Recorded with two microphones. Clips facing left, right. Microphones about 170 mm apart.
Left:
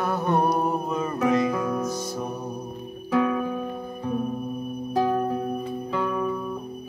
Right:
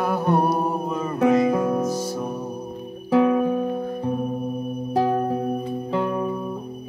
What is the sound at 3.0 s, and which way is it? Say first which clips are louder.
Guitar: right 5 dB; 25° right (ahead or behind).